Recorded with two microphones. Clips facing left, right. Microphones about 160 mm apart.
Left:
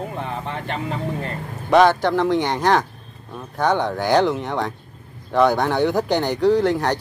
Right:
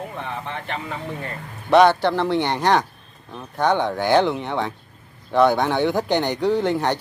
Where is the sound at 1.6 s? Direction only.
Centre (ahead or behind).